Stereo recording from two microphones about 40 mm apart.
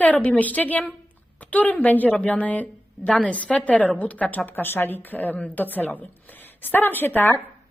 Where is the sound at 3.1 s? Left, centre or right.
Left.